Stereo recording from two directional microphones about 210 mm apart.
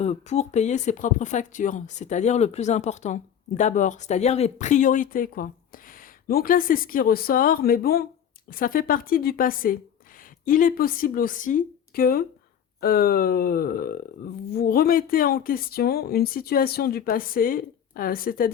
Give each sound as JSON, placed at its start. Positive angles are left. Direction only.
{"t": 0.0, "sound": "speech", "side_deg": 30}